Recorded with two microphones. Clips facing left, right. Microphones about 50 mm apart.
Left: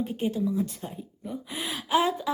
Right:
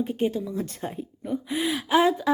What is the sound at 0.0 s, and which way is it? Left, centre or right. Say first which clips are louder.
A woman's voice: right 2 dB; right.